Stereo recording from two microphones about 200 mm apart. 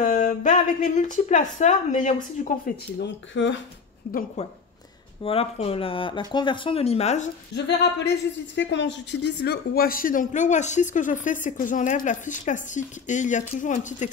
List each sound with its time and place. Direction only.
0.0 s a woman's voice: 40° left (ahead or behind)
3.0 s speech: 65° left (ahead or behind)
4.1 s a woman's voice: 50° left (ahead or behind)
5.2 s speech: 30° left (ahead or behind)
7.5 s a woman's voice: 55° left (ahead or behind); by 14.0 s 40° left (ahead or behind)